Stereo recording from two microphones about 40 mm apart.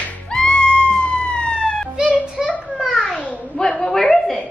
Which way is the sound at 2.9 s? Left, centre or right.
Left.